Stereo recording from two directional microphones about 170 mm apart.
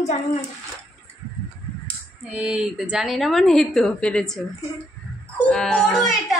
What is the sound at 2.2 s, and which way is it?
A woman's voice, 5° right (ahead or behind).